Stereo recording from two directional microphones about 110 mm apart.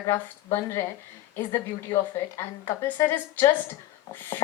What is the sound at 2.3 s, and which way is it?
Speech, 20° left (ahead or behind).